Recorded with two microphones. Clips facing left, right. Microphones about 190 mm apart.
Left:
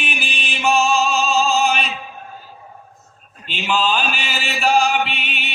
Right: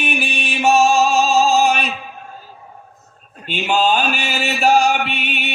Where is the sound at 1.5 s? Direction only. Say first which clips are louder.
Right 3 dB; 45° right (ahead or behind).